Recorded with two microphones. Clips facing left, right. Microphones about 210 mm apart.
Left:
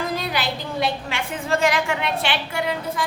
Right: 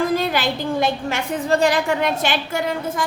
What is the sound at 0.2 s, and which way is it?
A woman's voice, 50° right (ahead or behind).